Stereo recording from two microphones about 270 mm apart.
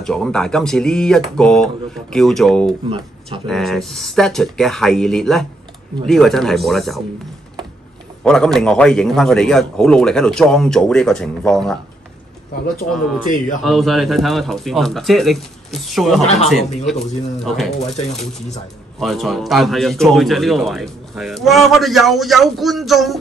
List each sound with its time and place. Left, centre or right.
0.0 s a man's voice: centre
8.2 s a man's voice: centre
13.6 s a man's voice: centre
17.7 s speech: left
18.9 s a man's voice: centre